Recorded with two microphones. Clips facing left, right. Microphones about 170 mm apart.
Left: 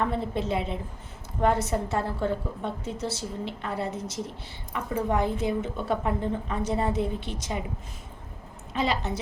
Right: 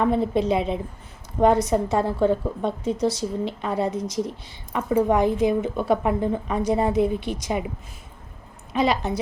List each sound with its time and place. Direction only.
0.0 s a woman's voice: 15° right (ahead or behind)
8.7 s a woman's voice: 15° right (ahead or behind)